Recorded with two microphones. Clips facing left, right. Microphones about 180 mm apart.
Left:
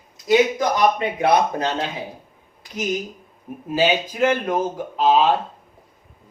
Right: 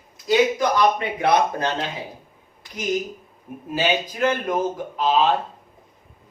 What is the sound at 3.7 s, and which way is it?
Speech, 15° left (ahead or behind).